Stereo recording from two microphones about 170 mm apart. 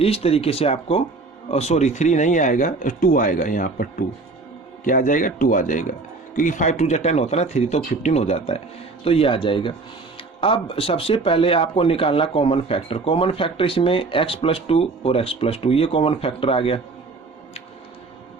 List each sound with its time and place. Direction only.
0.0 s speech: 35° left (ahead or behind); by 3.8 s 50° left (ahead or behind)
4.9 s speech: 50° left (ahead or behind); by 16.8 s 35° left (ahead or behind)